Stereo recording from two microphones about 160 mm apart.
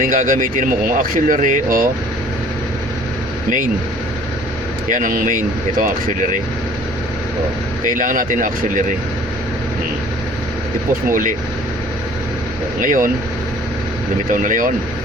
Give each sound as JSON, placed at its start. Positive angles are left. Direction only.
{"t": 0.1, "sound": "speech", "side_deg": -55}
{"t": 4.9, "sound": "speech", "side_deg": -55}
{"t": 7.9, "sound": "speech", "side_deg": -55}
{"t": 12.8, "sound": "speech", "side_deg": -55}
{"t": 14.3, "sound": "speech", "side_deg": -55}